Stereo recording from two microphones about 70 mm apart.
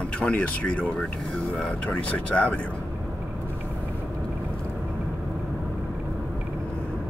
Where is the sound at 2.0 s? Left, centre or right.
Left.